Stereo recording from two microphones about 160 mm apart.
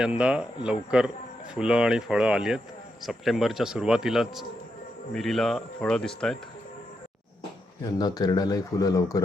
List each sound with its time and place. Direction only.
0.0 s speech: 5° right (ahead or behind)
7.9 s speech: 25° left (ahead or behind)